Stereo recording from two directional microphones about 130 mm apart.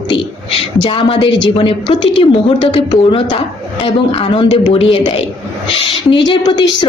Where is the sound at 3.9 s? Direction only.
40° left (ahead or behind).